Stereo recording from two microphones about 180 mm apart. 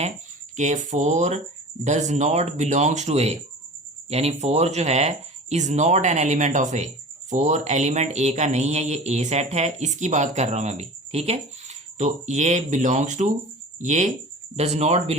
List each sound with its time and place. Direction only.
0.5 s speech: 40° right (ahead or behind)